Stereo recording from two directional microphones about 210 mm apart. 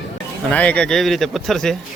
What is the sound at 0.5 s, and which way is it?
Speech, 5° left (ahead or behind).